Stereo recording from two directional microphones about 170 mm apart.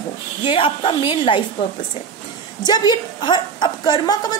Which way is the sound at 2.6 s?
25° left (ahead or behind).